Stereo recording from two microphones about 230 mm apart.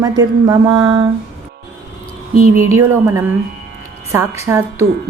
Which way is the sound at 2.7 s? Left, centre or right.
Centre.